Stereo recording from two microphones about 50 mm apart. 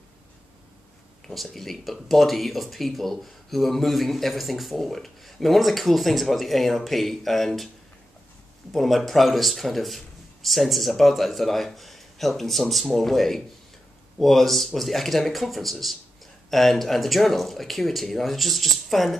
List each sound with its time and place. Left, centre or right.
1.2 s speech: centre
8.7 s speech: centre